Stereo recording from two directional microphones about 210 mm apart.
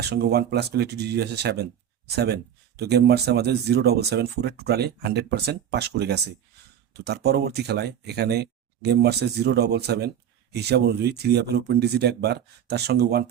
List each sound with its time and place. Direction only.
0.0 s speech: 50° right (ahead or behind)